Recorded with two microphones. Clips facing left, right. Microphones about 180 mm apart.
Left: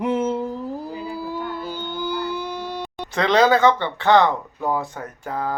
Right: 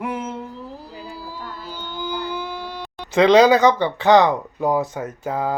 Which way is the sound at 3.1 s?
15° right (ahead or behind).